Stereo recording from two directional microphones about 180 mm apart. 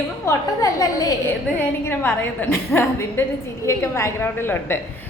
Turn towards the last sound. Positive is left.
turn(degrees=15)  # may be behind; listen again after turning